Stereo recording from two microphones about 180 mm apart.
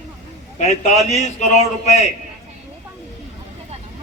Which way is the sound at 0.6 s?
40° left (ahead or behind).